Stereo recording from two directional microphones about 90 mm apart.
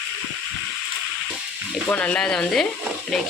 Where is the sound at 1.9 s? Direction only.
15° left (ahead or behind).